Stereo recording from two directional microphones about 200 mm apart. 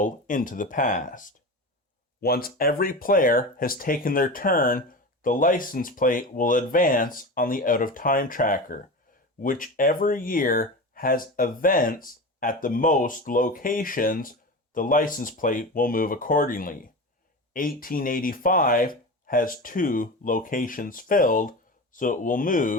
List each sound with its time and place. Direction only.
0.0 s speech: 40° left (ahead or behind)